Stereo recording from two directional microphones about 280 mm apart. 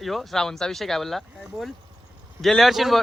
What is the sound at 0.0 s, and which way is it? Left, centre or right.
A man's voice, centre.